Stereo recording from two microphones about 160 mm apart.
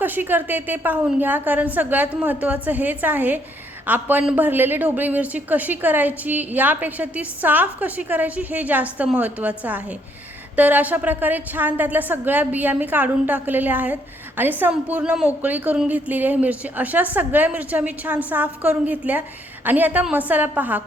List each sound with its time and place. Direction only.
0.0 s a woman's voice: 10° right (ahead or behind)